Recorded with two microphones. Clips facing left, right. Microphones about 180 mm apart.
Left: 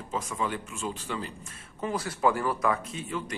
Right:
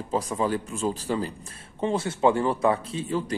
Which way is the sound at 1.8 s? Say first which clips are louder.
Right 5 dB; 25° right (ahead or behind).